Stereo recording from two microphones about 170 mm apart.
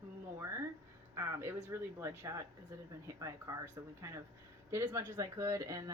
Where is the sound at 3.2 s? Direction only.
20° right (ahead or behind).